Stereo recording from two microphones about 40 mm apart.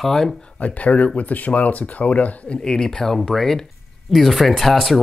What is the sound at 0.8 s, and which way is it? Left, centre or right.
Speech, left.